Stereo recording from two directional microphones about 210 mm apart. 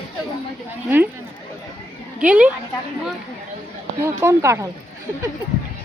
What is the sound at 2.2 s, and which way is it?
Speech, 5° right (ahead or behind).